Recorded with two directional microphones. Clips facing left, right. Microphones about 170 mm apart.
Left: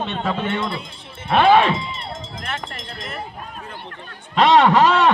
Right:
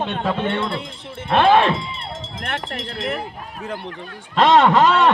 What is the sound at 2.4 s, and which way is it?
Speech, 60° right (ahead or behind).